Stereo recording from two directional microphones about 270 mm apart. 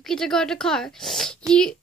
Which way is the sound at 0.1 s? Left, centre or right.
Centre.